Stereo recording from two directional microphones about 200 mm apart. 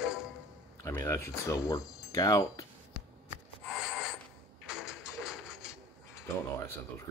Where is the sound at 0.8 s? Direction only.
15° left (ahead or behind).